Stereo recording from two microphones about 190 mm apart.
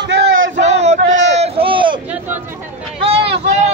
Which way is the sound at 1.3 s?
30° right (ahead or behind).